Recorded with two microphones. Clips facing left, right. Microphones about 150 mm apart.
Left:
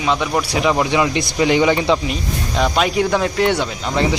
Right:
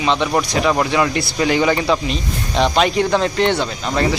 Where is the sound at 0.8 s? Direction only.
15° left (ahead or behind).